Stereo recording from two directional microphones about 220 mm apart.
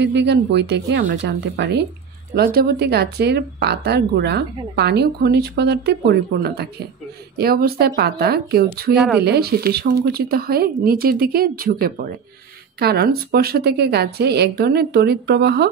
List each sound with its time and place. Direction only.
0.0 s speech: 50° right (ahead or behind)
8.9 s speech: centre (ahead or behind)
9.2 s speech: 45° right (ahead or behind)